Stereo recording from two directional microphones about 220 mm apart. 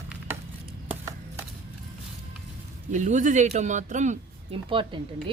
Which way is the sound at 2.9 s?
35° right (ahead or behind).